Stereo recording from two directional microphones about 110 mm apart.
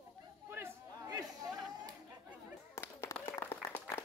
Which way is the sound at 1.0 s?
35° right (ahead or behind).